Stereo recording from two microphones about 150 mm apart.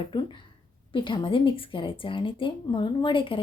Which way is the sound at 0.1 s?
30° left (ahead or behind).